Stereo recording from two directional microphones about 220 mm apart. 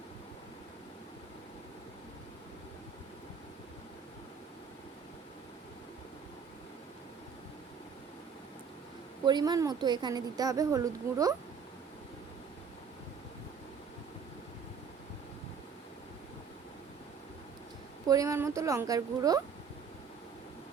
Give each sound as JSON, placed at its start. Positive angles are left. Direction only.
{"t": 9.2, "sound": "a woman's voice", "side_deg": -20}
{"t": 18.1, "sound": "a woman's voice", "side_deg": -15}